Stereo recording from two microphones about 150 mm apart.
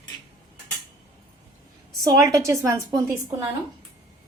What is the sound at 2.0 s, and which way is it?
A woman's voice, 25° right (ahead or behind).